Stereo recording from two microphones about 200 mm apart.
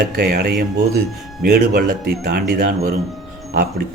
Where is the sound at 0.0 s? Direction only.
50° right (ahead or behind).